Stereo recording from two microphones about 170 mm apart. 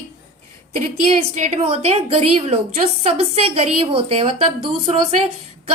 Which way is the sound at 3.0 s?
35° right (ahead or behind).